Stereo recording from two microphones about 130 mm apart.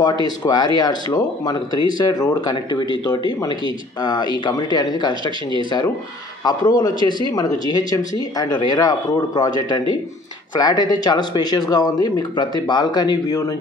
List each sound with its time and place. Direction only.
0.0 s speech: 35° left (ahead or behind)
6.4 s speech: 35° left (ahead or behind)